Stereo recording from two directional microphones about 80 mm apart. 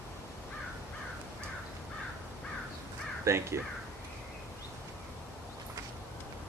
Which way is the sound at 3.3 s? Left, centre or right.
Right.